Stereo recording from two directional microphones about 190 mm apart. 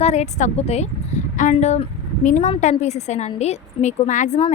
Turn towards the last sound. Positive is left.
turn(degrees=35)  # may be behind; listen again after turning